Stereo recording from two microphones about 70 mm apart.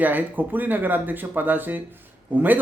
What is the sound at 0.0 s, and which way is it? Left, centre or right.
Speech, right.